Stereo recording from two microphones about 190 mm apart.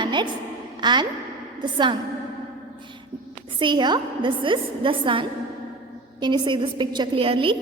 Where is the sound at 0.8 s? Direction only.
25° right (ahead or behind).